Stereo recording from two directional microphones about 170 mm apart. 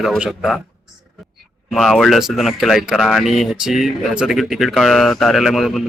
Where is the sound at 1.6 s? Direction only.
Centre (ahead or behind).